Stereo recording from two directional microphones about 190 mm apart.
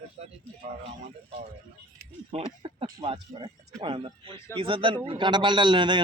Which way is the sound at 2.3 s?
30° right (ahead or behind).